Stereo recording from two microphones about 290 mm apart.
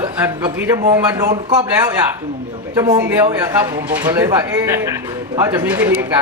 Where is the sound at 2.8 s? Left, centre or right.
Centre.